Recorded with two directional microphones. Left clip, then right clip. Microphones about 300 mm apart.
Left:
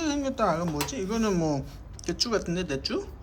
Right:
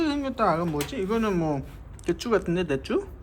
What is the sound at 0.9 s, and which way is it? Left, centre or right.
Speech, centre.